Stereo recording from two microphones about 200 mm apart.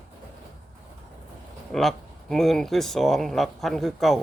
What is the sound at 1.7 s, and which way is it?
Speech, centre (ahead or behind).